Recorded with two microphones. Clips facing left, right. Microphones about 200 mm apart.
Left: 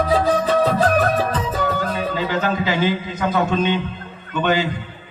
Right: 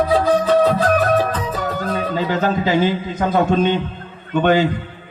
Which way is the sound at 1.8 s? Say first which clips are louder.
Right 2 dB; 40° right (ahead or behind).